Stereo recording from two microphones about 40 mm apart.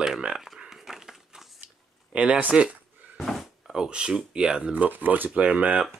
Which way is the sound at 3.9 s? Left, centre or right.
Right.